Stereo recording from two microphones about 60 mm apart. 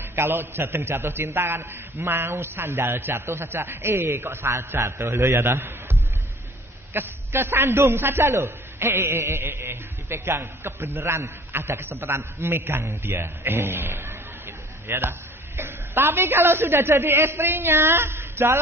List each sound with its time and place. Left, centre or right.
0.0 s a man's voice: right